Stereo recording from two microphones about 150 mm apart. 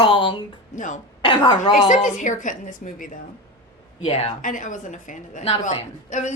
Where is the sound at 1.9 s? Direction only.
55° left (ahead or behind).